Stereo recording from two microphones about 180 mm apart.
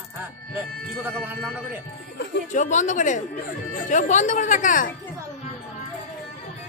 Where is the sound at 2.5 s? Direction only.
40° left (ahead or behind).